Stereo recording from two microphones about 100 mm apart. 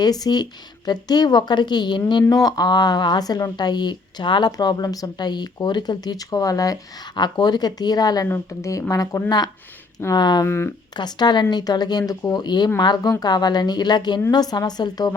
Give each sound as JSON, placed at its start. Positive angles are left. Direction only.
{"t": 0.0, "sound": "a woman's voice", "side_deg": 40}
{"t": 7.2, "sound": "a woman's voice", "side_deg": 45}
{"t": 8.3, "sound": "a woman's voice", "side_deg": 30}
{"t": 10.4, "sound": "speech", "side_deg": 25}
{"t": 10.9, "sound": "a woman's voice", "side_deg": 45}